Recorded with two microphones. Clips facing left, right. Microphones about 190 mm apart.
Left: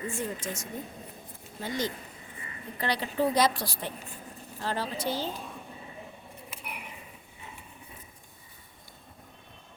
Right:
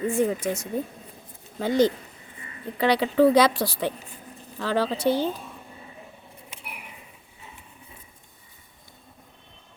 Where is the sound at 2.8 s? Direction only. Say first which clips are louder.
Right 9 dB; 80° right; by 5.3 s 60° right (ahead or behind).